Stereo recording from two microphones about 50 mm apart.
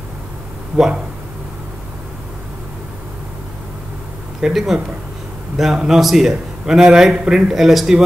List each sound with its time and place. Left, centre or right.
0.7 s a man's voice: centre
4.4 s a man's voice: centre